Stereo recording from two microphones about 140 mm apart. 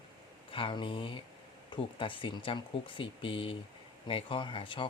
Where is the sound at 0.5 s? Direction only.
35° left (ahead or behind).